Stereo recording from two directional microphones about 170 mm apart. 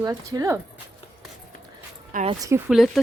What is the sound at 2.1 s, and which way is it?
Speech, 50° right (ahead or behind).